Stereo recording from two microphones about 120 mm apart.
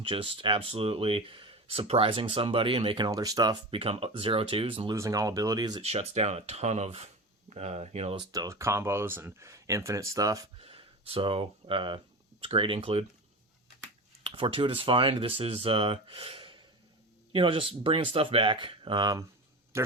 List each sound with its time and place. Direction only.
0.1 s speech: 45° right (ahead or behind)
3.1 s speech: 30° right (ahead or behind)
3.7 s speech: 50° right (ahead or behind)
4.9 s speech: 30° right (ahead or behind)
5.8 s speech: 60° right (ahead or behind)
8.3 s speech: 30° right (ahead or behind)
10.6 s speech: 55° right (ahead or behind)
14.3 s speech: 50° right (ahead or behind)
19.7 s speech: 20° right (ahead or behind)